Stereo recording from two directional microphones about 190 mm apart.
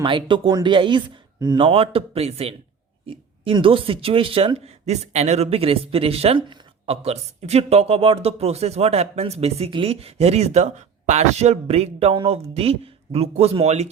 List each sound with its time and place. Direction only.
0.0 s speech: 25° right (ahead or behind)